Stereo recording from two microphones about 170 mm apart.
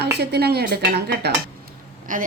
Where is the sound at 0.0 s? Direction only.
75° right (ahead or behind).